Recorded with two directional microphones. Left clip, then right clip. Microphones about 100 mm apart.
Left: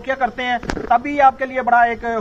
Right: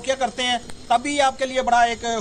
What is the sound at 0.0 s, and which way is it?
A man's voice, 35° right (ahead or behind).